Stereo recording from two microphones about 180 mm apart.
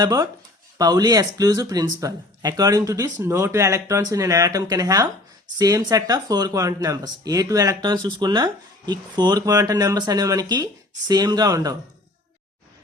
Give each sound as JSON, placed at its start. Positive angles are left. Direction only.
{"t": 0.0, "sound": "speech", "side_deg": -20}